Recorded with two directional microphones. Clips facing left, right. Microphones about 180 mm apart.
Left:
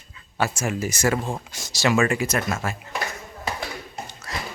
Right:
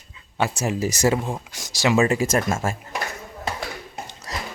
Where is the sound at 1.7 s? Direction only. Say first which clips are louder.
Right 2 dB; 20° right (ahead or behind).